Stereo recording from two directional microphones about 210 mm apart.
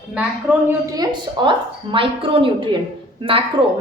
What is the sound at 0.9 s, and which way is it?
A woman's voice, 20° right (ahead or behind).